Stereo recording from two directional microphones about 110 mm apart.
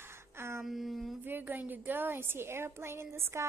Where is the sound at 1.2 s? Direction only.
20° right (ahead or behind).